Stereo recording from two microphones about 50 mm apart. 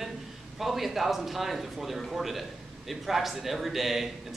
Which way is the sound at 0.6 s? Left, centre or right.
Centre.